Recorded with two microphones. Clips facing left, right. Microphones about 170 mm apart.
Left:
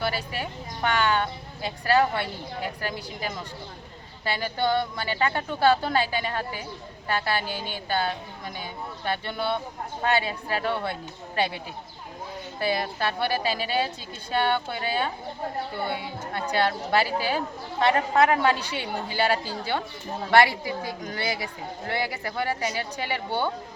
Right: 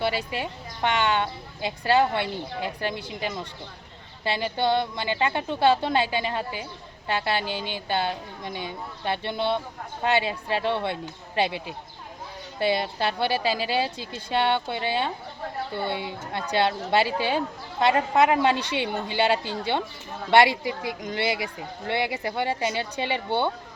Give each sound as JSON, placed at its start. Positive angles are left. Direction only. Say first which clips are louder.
{"t": 0.0, "sound": "a woman's voice", "louder": "right 2 dB", "side_deg": -25}
{"t": 9.0, "sound": "a woman's voice", "louder": "right 2 dB", "side_deg": -25}
{"t": 12.5, "sound": "a woman's voice", "louder": "right 3 dB", "side_deg": -25}
{"t": 21.0, "sound": "a woman's voice", "louder": "right 3 dB", "side_deg": -25}